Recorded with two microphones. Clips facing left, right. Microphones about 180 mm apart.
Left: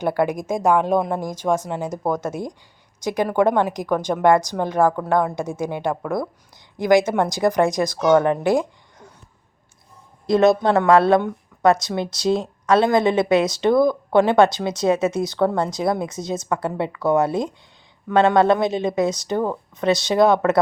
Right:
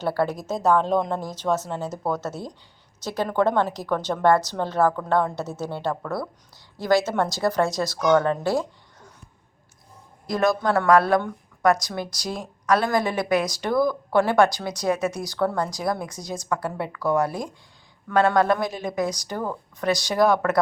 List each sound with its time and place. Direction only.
0.0 s a woman's voice: 15° left (ahead or behind)
10.2 s speech: 25° left (ahead or behind)